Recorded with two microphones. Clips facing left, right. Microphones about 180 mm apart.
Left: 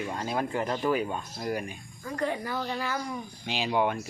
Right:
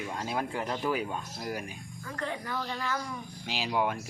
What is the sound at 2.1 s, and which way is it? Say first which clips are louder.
Speech: left 5 dB; 10° left (ahead or behind).